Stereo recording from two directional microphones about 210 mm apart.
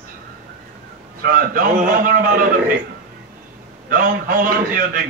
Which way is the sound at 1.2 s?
40° right (ahead or behind).